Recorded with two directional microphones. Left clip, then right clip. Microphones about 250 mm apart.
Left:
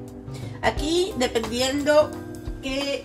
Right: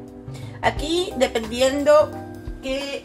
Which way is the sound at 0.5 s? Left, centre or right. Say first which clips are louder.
Right 1 dB; right.